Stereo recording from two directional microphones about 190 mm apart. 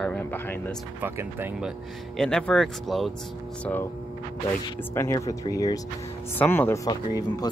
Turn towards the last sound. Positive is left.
turn(degrees=20)  # may be behind; listen again after turning